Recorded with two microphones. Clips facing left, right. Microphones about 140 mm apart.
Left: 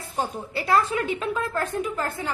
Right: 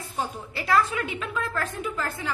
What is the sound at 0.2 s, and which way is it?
A woman's voice, 30° left (ahead or behind).